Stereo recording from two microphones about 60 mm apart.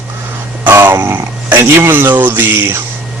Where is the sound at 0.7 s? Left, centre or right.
Right.